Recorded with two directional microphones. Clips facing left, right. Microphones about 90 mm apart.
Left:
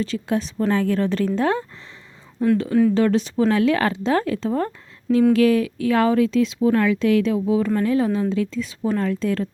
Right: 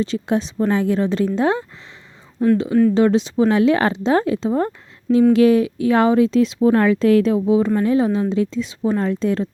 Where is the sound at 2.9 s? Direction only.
20° right (ahead or behind).